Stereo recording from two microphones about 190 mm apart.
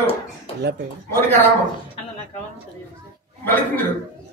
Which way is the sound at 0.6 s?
60° right (ahead or behind).